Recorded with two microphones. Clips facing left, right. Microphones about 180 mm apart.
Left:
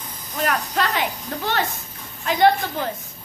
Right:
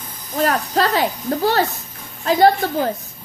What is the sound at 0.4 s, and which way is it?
Speech, 35° right (ahead or behind).